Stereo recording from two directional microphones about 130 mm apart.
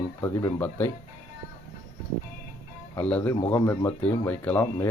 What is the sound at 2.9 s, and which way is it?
Speech, 10° left (ahead or behind).